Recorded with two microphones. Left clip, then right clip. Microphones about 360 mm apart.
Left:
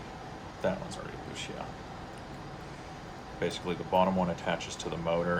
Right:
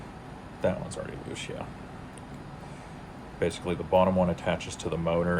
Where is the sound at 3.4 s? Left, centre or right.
Centre.